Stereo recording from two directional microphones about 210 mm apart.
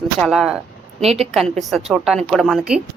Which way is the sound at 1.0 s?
30° right (ahead or behind).